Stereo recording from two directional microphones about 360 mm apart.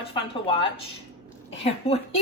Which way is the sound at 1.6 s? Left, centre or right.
Centre.